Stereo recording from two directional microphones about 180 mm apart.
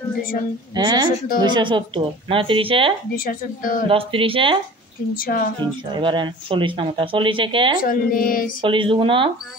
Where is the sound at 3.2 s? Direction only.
50° left (ahead or behind).